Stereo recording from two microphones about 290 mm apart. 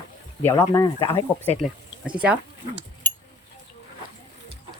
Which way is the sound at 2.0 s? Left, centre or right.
Centre.